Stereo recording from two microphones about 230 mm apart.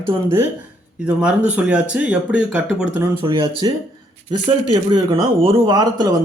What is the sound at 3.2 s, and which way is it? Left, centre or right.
Speech, right.